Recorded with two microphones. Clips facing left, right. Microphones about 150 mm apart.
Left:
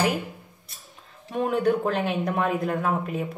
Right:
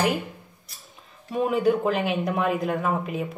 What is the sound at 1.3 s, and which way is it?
Speech, 5° right (ahead or behind).